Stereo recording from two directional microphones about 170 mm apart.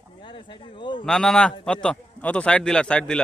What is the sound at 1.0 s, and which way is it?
Speech, 5° left (ahead or behind).